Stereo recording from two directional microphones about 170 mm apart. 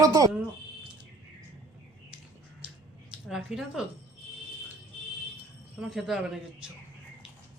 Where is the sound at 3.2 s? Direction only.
Centre (ahead or behind).